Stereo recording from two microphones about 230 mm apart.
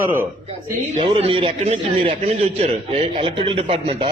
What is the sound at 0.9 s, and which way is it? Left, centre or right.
A man's voice, right.